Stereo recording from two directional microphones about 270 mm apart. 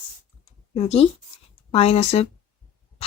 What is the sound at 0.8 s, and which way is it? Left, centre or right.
Speech, left.